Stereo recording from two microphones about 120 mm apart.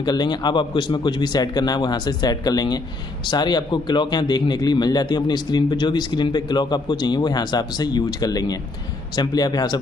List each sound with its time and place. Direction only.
0.0 s a man's voice: 35° left (ahead or behind)